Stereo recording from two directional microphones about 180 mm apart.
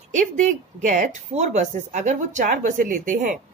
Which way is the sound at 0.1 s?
45° right (ahead or behind).